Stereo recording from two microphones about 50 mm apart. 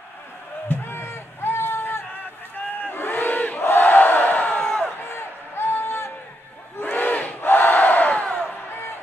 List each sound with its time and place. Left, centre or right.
0.7 s a sound: left
2.9 s battle cry: left
4.6 s crowd: centre
5.1 s a sound: left
6.8 s battle cry: left
8.2 s crowd: left